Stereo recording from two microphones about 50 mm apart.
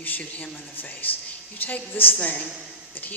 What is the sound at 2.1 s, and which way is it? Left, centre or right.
Speech, left.